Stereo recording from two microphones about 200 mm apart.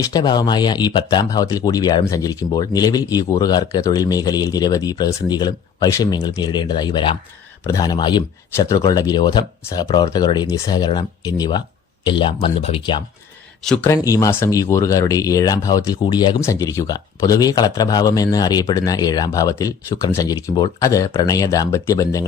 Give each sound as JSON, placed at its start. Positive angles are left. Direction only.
{"t": 0.0, "sound": "speech", "side_deg": 20}
{"t": 13.7, "sound": "speech", "side_deg": 15}